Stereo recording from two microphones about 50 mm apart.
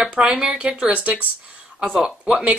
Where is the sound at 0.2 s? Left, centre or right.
Centre.